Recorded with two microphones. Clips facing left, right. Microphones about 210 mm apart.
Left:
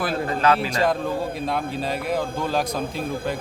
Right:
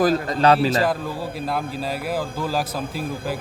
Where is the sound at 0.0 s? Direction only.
40° right (ahead or behind).